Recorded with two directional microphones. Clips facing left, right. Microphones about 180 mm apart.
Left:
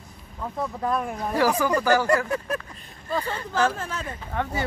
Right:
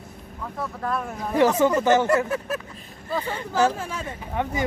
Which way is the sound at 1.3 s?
25° right (ahead or behind).